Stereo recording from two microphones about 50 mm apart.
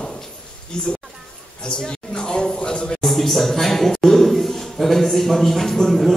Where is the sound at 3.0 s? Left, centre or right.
Centre.